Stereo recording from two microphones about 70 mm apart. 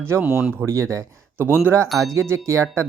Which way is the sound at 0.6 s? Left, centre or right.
Right.